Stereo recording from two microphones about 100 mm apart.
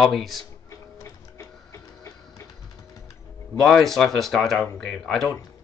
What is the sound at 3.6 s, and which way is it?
Speech, 5° left (ahead or behind).